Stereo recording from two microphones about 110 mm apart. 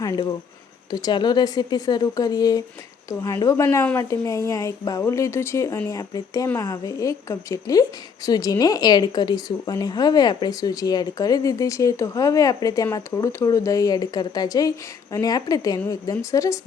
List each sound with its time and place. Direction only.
0.0 s a woman's voice: 40° left (ahead or behind)